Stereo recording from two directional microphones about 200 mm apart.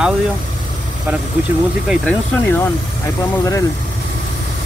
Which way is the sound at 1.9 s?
10° left (ahead or behind).